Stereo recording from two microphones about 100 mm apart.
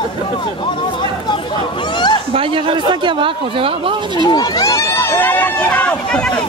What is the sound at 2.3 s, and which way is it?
A man's voice, 65° right (ahead or behind).